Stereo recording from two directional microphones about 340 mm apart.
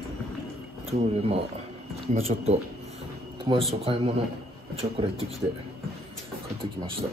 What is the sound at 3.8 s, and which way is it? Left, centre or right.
Speech, centre.